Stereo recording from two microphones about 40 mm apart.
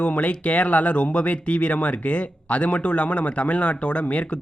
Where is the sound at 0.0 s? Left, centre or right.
Left.